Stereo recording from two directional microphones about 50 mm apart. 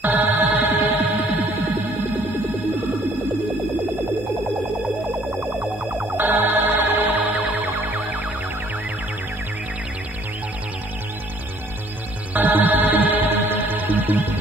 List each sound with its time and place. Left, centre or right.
0.0 s music: right
5.4 s music: centre
6.1 s music: right
12.4 s music: right